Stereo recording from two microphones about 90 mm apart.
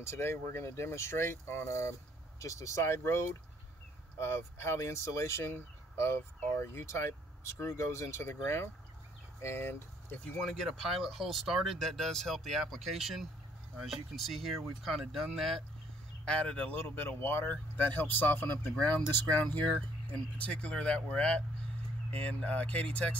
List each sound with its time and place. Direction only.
0.0 s speech: 30° left (ahead or behind)
10.3 s speech: centre (ahead or behind)
16.3 s speech: 15° left (ahead or behind)